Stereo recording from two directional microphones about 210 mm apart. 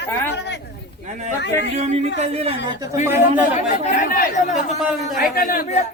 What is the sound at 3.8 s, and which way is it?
Speech, 40° left (ahead or behind).